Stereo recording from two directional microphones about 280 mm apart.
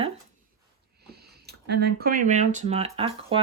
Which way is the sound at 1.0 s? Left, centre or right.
Right.